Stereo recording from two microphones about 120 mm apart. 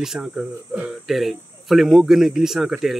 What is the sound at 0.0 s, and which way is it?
Cricket, 5° right (ahead or behind).